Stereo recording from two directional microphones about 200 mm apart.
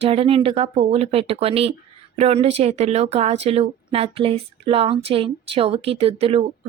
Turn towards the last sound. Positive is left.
turn(degrees=-30)  # may be behind; listen again after turning